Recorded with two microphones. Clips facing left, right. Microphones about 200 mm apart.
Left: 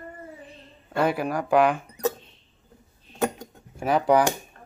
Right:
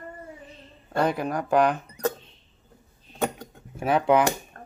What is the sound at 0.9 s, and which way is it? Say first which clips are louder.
Speech: left 1 dB; 5° left (ahead or behind).